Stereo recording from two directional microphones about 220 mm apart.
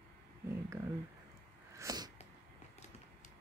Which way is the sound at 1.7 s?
15° right (ahead or behind).